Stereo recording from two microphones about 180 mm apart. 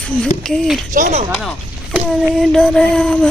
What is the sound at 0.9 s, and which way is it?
Speech, 40° right (ahead or behind).